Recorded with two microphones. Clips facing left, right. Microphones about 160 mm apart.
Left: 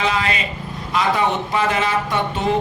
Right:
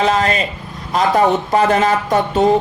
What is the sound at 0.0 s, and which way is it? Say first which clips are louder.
Speech: right 6 dB; 45° right (ahead or behind).